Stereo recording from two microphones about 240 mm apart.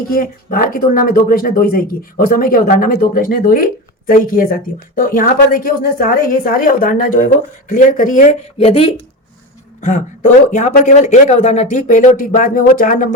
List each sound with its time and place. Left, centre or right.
0.1 s speech: left